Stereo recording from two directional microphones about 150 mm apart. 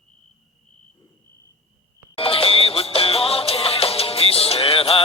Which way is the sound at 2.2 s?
40° left (ahead or behind).